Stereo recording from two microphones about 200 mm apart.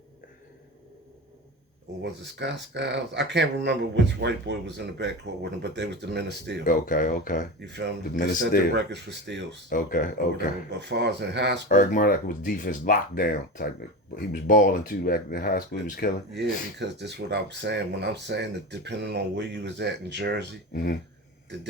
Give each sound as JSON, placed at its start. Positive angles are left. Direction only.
{"t": 2.0, "sound": "speech", "side_deg": -60}
{"t": 6.7, "sound": "speech", "side_deg": 40}
{"t": 7.6, "sound": "speech", "side_deg": -60}
{"t": 9.6, "sound": "speech", "side_deg": 40}
{"t": 10.7, "sound": "speech", "side_deg": -60}
{"t": 11.7, "sound": "speech", "side_deg": 40}
{"t": 16.3, "sound": "speech", "side_deg": -60}